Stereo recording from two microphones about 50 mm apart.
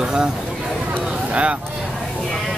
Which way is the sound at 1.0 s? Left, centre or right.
Right.